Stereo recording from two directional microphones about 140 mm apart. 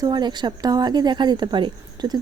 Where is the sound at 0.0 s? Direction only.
30° right (ahead or behind).